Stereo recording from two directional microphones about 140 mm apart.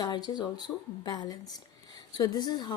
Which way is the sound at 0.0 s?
30° left (ahead or behind).